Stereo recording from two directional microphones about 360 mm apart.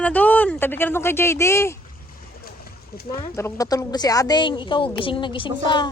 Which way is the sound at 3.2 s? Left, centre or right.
Centre.